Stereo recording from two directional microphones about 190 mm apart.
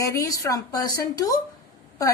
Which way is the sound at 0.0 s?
15° left (ahead or behind).